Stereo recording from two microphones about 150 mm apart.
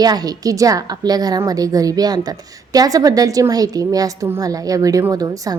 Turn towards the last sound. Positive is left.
turn(degrees=-25)  # may be behind; listen again after turning